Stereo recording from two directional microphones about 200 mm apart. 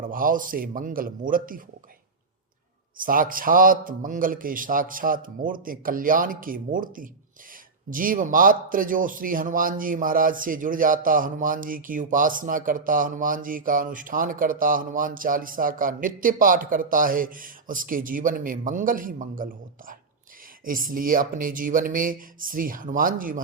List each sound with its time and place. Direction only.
0.0 s a man's voice: 45° right (ahead or behind)
3.0 s a man's voice: 45° right (ahead or behind)